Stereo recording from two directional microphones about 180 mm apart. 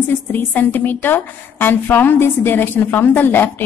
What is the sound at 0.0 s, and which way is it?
A woman's voice, 10° left (ahead or behind).